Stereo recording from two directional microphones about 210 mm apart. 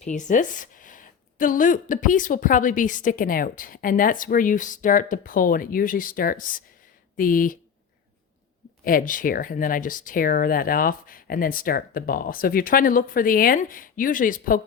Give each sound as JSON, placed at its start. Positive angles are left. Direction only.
{"t": 0.0, "sound": "a woman's voice", "side_deg": 35}
{"t": 8.8, "sound": "a woman's voice", "side_deg": 40}